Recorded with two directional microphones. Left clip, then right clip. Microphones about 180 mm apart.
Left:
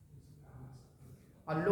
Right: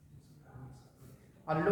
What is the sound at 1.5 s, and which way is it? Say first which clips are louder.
Speech: right 3 dB; 25° left (ahead or behind).